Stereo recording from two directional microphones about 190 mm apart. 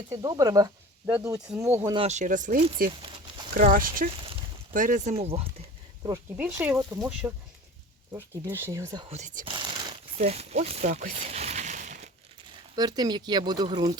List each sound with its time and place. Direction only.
0.1 s speech: 20° right (ahead or behind)
2.0 s speech: 35° right (ahead or behind)
6.3 s speech: 10° right (ahead or behind)
8.4 s speech: 15° right (ahead or behind)
9.0 s speech: 40° right (ahead or behind)
9.5 s a sound: 25° right (ahead or behind)
10.2 s a sound: 35° right (ahead or behind)
12.7 s speech: 20° right (ahead or behind)